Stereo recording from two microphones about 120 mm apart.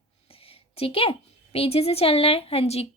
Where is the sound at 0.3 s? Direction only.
50° left (ahead or behind).